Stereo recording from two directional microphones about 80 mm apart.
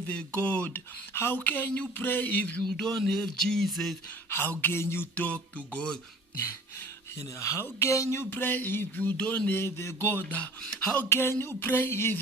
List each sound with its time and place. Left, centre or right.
0.0 s speech: centre
2.6 s speech: centre
4.3 s speech: left
5.2 s music: centre
7.2 s a woman's voice: left
8.3 s speech: left
9.5 s a woman's voice: left
10.6 s music: centre
11.1 s speech: left